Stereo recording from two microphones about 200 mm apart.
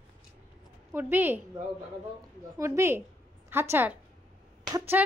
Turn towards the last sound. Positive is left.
turn(degrees=-15)  # may be behind; listen again after turning